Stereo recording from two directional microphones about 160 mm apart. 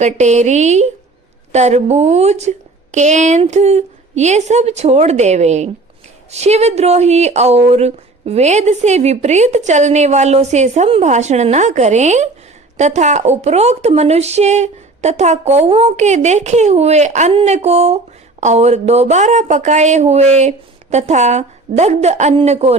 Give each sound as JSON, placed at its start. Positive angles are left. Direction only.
{"t": 0.0, "sound": "speech", "side_deg": -45}